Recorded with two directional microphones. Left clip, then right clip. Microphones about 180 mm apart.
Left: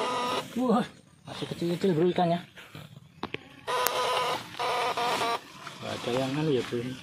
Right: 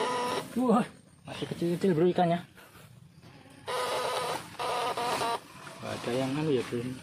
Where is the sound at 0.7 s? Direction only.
30° left (ahead or behind).